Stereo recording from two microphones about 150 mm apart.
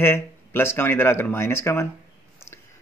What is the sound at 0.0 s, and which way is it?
Speech, 15° left (ahead or behind).